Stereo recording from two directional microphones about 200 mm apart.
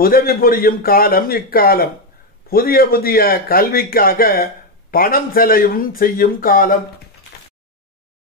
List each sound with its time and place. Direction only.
0.0 s a man's voice: 50° left (ahead or behind)